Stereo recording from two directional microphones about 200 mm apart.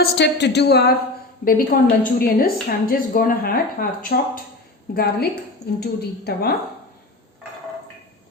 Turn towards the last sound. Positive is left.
turn(degrees=50)  # may be behind; listen again after turning